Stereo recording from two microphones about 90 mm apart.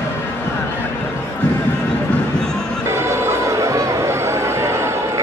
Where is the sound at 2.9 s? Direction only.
30° right (ahead or behind).